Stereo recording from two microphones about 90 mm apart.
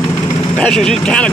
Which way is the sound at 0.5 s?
10° left (ahead or behind).